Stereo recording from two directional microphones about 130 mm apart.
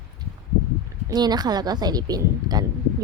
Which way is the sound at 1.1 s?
30° right (ahead or behind).